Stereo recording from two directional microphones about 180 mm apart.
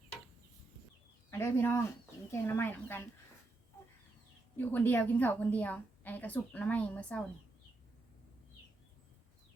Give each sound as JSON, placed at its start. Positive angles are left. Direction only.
{"t": 1.3, "sound": "a woman's voice", "side_deg": 15}
{"t": 4.5, "sound": "a woman's voice", "side_deg": 10}